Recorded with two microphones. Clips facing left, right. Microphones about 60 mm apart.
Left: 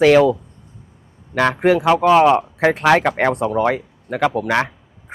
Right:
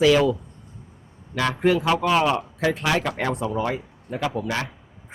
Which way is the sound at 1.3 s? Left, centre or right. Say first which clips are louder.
Left 6 dB; left.